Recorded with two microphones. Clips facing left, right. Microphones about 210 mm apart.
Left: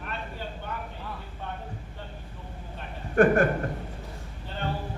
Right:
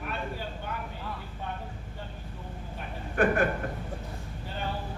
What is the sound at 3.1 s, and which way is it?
Speech, 45° left (ahead or behind).